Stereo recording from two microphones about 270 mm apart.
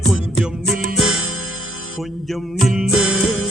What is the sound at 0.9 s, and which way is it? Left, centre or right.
Music, right.